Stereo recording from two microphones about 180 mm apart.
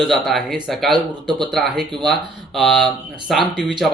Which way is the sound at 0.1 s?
Centre (ahead or behind).